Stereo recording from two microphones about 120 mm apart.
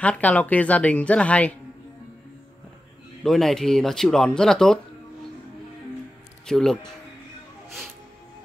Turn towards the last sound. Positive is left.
turn(degrees=5)  # may be behind; listen again after turning